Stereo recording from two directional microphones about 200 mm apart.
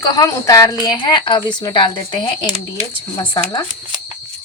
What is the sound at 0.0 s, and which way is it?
A woman's voice, 20° left (ahead or behind).